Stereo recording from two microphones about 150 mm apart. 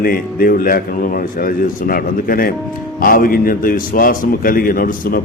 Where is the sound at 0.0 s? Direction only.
75° left (ahead or behind).